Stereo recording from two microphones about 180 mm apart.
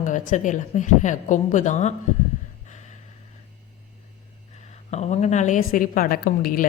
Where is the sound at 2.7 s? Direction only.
40° left (ahead or behind).